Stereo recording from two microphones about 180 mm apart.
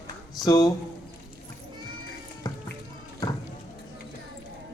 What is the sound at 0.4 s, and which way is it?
Speech, 20° left (ahead or behind).